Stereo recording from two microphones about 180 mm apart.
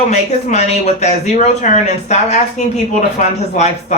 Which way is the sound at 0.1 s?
40° left (ahead or behind).